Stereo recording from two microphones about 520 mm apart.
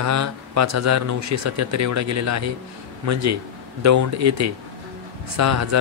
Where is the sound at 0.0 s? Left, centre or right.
Right.